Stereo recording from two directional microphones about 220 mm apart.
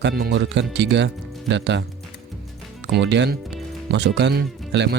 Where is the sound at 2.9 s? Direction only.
55° right (ahead or behind).